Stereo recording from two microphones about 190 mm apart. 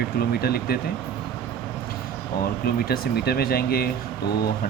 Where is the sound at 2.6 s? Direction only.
55° left (ahead or behind).